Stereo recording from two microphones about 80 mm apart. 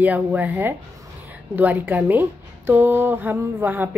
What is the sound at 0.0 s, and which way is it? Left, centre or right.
A woman's voice, centre.